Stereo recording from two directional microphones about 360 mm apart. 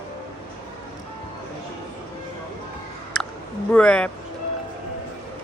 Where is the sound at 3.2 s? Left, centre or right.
Centre.